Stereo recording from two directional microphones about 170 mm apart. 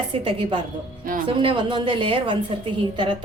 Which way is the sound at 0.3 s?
30° right (ahead or behind).